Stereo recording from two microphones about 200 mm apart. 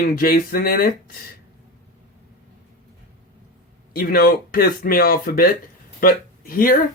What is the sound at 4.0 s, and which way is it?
Speech, 45° left (ahead or behind).